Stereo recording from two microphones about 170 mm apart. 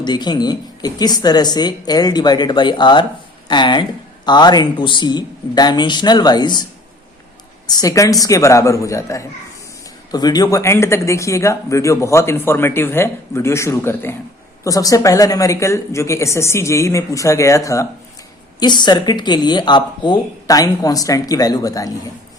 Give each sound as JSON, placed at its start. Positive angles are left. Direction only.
{"t": 0.0, "sound": "speech", "side_deg": 25}
{"t": 7.7, "sound": "speech", "side_deg": 20}